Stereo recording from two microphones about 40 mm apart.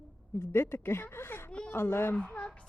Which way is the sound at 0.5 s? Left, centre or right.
Left.